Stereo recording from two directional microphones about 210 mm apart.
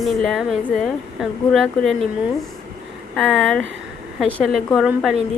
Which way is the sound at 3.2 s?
5° left (ahead or behind).